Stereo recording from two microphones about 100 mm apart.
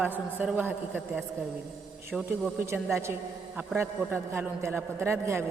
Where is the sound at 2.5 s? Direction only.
20° right (ahead or behind).